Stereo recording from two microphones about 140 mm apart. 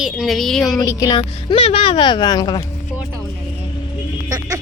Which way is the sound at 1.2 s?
40° left (ahead or behind).